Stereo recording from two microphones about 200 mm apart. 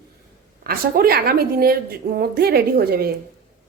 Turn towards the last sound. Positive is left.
turn(degrees=-50)  # may be behind; listen again after turning